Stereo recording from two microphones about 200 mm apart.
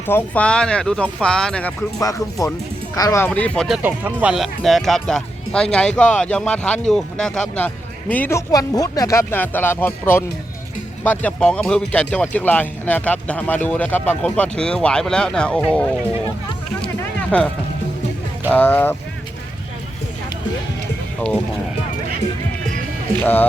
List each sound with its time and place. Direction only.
0.1 s speech: 10° left (ahead or behind)
2.0 s speech: 15° left (ahead or behind)
3.8 s speech: 10° right (ahead or behind)
17.3 s speech: 5° left (ahead or behind)
18.5 s speech: 10° left (ahead or behind)
21.2 s speech: 10° left (ahead or behind)
23.2 s speech: 10° left (ahead or behind)